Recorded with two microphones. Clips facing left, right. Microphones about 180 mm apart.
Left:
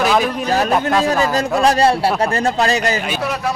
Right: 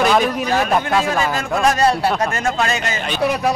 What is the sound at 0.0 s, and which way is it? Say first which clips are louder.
A man's voice: even; centre (ahead or behind).